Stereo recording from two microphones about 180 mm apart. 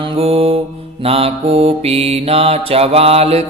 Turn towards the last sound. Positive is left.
turn(degrees=-35)  # may be behind; listen again after turning